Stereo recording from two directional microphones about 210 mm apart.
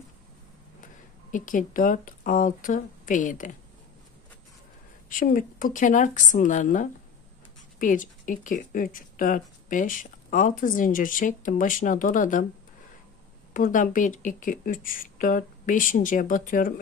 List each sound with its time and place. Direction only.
1.3 s speech: 40° left (ahead or behind)
5.2 s speech: 40° left (ahead or behind)
13.5 s speech: 40° left (ahead or behind)